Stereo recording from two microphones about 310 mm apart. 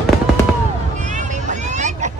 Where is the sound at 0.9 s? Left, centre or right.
Right.